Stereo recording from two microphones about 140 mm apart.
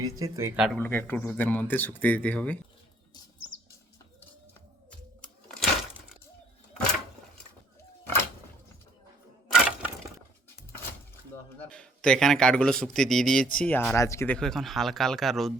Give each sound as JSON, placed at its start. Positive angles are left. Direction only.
{"t": 0.0, "sound": "speech", "side_deg": -20}
{"t": 0.5, "sound": "a man's voice", "side_deg": -5}
{"t": 0.8, "sound": "speech", "side_deg": 15}
{"t": 5.2, "sound": "a sound", "side_deg": 5}
{"t": 9.5, "sound": "breaking", "side_deg": -10}
{"t": 11.7, "sound": "a man's voice", "side_deg": 5}
{"t": 14.3, "sound": "a man's voice", "side_deg": 5}